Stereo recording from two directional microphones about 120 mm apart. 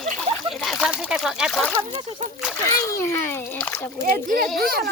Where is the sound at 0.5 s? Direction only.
Centre (ahead or behind).